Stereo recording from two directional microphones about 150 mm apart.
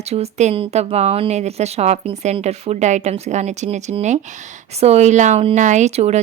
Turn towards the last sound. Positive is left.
turn(degrees=-45)  # may be behind; listen again after turning